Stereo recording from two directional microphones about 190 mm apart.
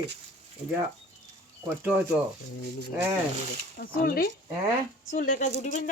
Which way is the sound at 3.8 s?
50° left (ahead or behind).